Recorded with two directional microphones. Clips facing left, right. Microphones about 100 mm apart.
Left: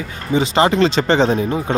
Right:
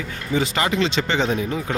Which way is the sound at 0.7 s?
40° left (ahead or behind).